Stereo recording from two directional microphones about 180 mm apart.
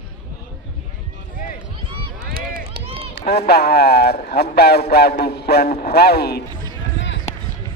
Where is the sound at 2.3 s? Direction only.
55° right (ahead or behind).